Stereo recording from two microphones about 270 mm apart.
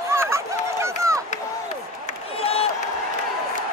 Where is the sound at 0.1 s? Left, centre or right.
Centre.